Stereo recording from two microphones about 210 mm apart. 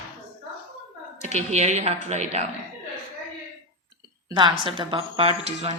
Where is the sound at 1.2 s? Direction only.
30° right (ahead or behind).